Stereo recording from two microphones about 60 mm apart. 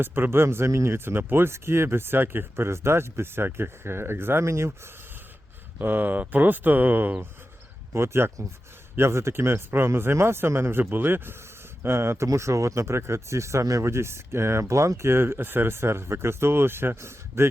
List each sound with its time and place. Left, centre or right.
0.0 s speech: right
0.9 s speech: right
5.8 s speech: right
7.9 s speech: right